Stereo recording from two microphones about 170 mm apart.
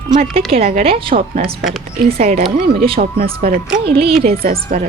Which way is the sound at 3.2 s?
60° right (ahead or behind).